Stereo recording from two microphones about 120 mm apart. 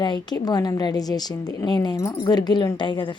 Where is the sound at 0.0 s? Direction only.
35° left (ahead or behind).